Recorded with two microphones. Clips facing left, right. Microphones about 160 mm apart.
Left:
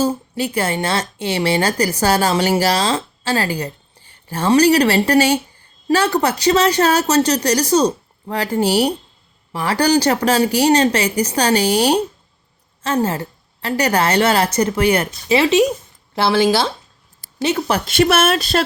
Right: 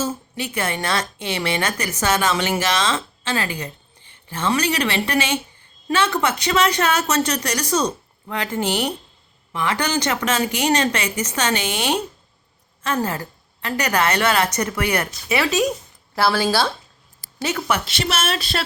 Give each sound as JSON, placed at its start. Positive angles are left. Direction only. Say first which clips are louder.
{"t": 0.0, "sound": "a woman's voice", "louder": "left 7 dB", "side_deg": 35}
{"t": 17.4, "sound": "a woman's voice", "louder": "left 4 dB", "side_deg": 30}
{"t": 17.8, "sound": "speech", "louder": "left 9 dB", "side_deg": 50}